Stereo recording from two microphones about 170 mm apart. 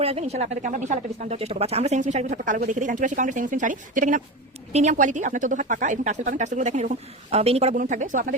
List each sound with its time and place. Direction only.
0.0 s speech: 35° right (ahead or behind)
7.8 s speech: 50° right (ahead or behind)